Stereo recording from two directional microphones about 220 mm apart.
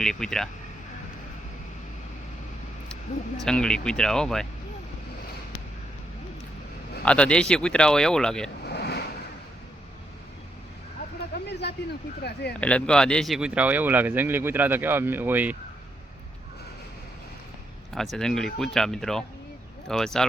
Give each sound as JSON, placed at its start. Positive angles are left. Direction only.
{"t": 0.0, "sound": "speech", "side_deg": 5}
{"t": 3.4, "sound": "speech", "side_deg": 5}
{"t": 7.0, "sound": "speech", "side_deg": 5}
{"t": 8.6, "sound": "a sound", "side_deg": 50}
{"t": 12.2, "sound": "speech", "side_deg": 50}
{"t": 12.5, "sound": "speech", "side_deg": 5}
{"t": 17.9, "sound": "speech", "side_deg": 0}